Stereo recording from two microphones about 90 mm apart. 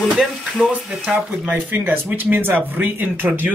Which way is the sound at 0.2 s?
Centre (ahead or behind).